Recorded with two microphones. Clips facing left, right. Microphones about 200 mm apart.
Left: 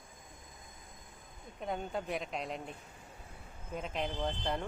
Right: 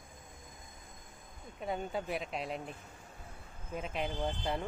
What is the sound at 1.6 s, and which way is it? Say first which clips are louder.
Speech: right 1 dB; centre (ahead or behind).